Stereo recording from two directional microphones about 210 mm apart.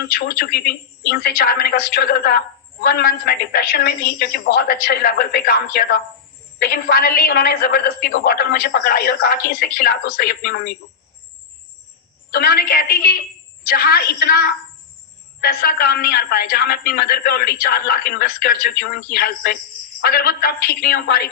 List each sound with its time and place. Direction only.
0.0 s a man's voice: 50° left (ahead or behind)
12.3 s a man's voice: 45° left (ahead or behind)